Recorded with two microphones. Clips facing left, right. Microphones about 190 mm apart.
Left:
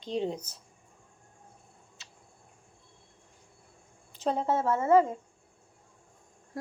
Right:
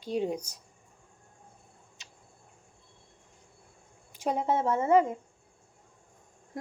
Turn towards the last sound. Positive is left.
turn(degrees=-20)  # may be behind; listen again after turning